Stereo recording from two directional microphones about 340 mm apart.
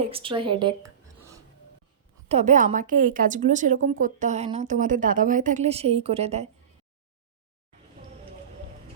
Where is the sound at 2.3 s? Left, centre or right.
Right.